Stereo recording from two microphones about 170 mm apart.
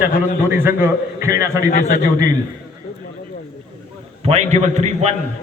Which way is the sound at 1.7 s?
60° left (ahead or behind).